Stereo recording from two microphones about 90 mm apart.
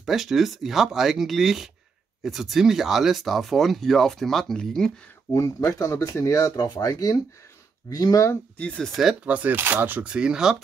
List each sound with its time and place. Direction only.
0.0 s speech: centre (ahead or behind)
5.3 s speech: 40° left (ahead or behind)
6.5 s speech: 50° left (ahead or behind)
8.5 s speech: 10° left (ahead or behind)
9.2 s speech: 15° right (ahead or behind)
10.0 s speech: 10° right (ahead or behind)